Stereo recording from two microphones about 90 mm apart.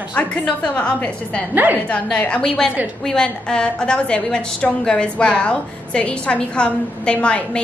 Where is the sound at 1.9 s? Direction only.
10° left (ahead or behind).